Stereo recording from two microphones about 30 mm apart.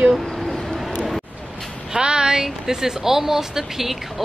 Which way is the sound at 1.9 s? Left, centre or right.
Right.